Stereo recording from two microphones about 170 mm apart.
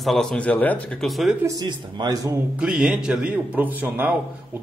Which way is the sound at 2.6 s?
5° right (ahead or behind).